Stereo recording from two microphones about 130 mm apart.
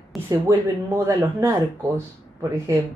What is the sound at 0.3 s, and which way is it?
Speech, 25° right (ahead or behind).